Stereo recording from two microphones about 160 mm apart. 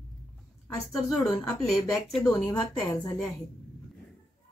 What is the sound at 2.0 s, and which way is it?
Speech, centre (ahead or behind).